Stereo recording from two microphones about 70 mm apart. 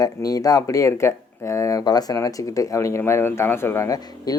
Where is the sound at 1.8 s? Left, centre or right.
Left.